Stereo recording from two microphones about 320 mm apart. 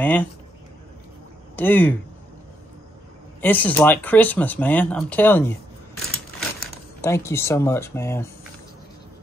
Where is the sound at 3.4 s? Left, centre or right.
Centre.